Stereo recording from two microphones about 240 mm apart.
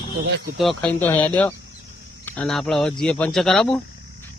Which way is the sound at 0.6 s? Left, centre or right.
Centre.